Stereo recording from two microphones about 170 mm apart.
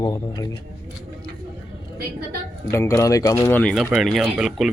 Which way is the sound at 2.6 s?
15° left (ahead or behind).